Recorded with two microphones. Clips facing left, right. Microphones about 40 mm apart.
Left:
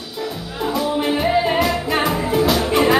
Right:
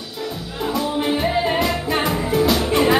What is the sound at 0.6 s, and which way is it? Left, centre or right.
Music, centre.